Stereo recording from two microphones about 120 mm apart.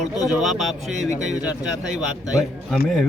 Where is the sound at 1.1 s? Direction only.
85° right.